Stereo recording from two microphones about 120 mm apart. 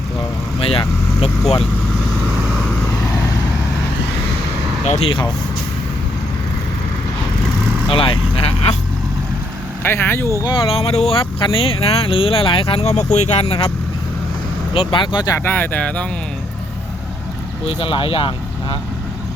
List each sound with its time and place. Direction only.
0.6 s speech: 50° left (ahead or behind)
7.9 s speech: 50° left (ahead or behind)
9.8 s speech: 20° left (ahead or behind)
10.4 s speech: 45° left (ahead or behind)
14.7 s speech: 45° left (ahead or behind)
15.4 s speech: 15° left (ahead or behind)
17.7 s speech: 45° left (ahead or behind)